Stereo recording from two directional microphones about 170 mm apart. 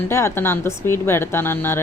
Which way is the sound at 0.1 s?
15° left (ahead or behind).